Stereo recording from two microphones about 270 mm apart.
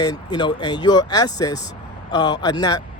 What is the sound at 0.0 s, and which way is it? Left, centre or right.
Speech, centre.